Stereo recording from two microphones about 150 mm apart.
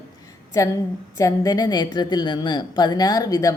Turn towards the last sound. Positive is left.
turn(degrees=25)  # may be behind; listen again after turning